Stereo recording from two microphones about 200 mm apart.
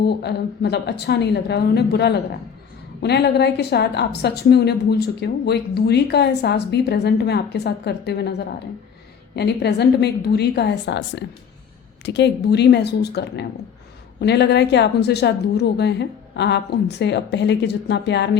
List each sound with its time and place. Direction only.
0.0 s a woman's voice: 55° left (ahead or behind)